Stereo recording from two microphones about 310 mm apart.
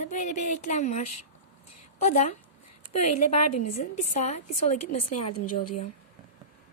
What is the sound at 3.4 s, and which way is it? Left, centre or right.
Speech, left.